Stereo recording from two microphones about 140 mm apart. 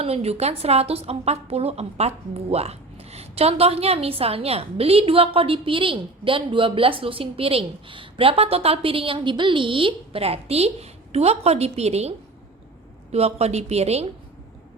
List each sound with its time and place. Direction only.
0.0 s a woman's voice: 45° right (ahead or behind)